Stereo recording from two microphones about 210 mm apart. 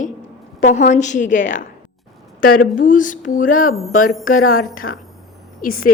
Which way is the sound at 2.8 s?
40° left (ahead or behind).